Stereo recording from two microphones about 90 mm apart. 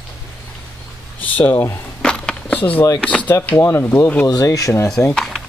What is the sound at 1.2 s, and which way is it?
Speech, 15° left (ahead or behind).